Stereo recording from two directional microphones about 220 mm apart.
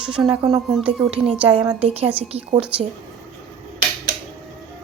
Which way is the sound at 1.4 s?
20° right (ahead or behind).